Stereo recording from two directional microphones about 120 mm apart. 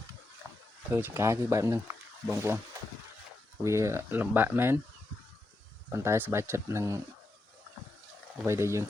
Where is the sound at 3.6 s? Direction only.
25° right (ahead or behind).